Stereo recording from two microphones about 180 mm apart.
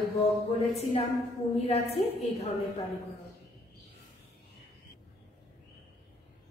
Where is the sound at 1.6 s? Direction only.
35° left (ahead or behind).